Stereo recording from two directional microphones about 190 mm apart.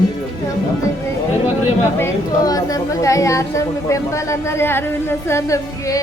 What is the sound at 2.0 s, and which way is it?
A woman's voice, 20° left (ahead or behind).